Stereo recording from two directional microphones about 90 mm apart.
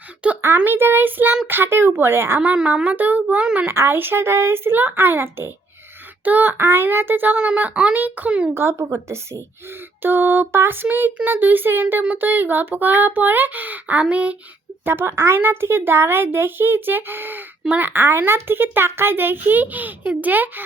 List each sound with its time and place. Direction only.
0.4 s speech: 25° right (ahead or behind)
2.4 s a child's voice: 15° right (ahead or behind)
8.5 s a woman's voice: 30° right (ahead or behind); by 14.3 s 15° right (ahead or behind)
14.8 s speech: 25° right (ahead or behind)